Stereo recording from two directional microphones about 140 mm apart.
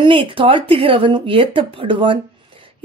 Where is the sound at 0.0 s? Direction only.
40° right (ahead or behind).